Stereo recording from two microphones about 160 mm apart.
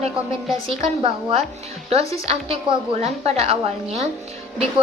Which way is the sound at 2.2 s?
35° right (ahead or behind).